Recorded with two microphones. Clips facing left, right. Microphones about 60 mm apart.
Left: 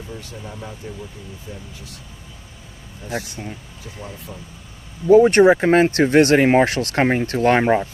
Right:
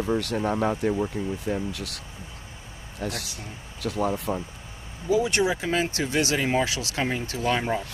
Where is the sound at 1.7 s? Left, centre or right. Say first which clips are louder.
Right 4 dB; right.